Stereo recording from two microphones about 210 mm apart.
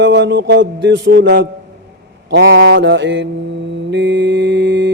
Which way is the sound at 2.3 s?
65° right (ahead or behind).